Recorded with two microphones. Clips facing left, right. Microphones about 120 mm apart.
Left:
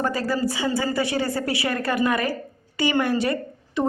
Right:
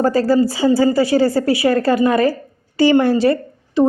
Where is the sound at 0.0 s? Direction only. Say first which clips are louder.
Right 9 dB; 35° right (ahead or behind).